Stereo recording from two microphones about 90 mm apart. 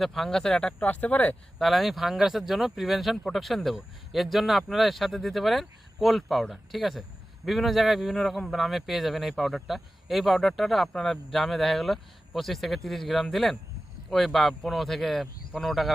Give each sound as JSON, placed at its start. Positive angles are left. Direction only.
{"t": 0.0, "sound": "speech", "side_deg": 5}
{"t": 1.5, "sound": "speech", "side_deg": 0}